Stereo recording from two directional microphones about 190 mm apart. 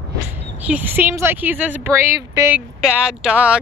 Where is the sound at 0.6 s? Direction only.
10° right (ahead or behind).